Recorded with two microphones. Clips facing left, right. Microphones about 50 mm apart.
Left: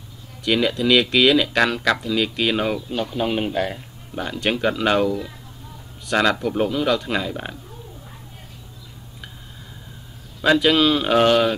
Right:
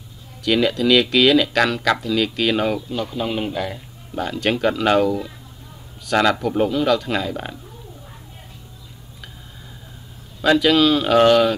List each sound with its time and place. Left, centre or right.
0.4 s speech: centre
3.2 s speech: left
3.7 s speech: centre
10.4 s speech: centre